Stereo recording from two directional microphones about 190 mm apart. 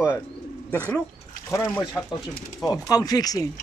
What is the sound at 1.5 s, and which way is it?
Speech, 15° left (ahead or behind).